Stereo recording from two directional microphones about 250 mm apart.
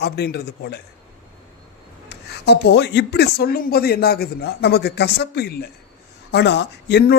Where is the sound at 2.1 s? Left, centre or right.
Left.